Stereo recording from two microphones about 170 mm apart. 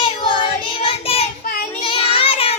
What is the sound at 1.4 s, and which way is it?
Child singing, 60° left (ahead or behind).